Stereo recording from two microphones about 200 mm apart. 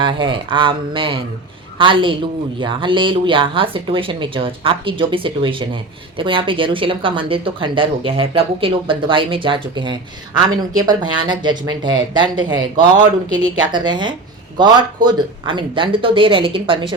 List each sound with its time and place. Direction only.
0.0 s speech: 25° right (ahead or behind)